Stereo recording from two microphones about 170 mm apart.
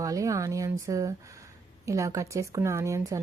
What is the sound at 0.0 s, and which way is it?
Speech, 20° right (ahead or behind).